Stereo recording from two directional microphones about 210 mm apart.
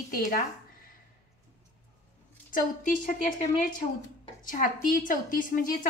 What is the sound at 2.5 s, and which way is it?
A woman's voice, 40° left (ahead or behind).